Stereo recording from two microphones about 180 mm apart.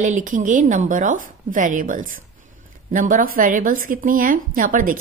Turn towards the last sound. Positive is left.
turn(degrees=-50)  # may be behind; listen again after turning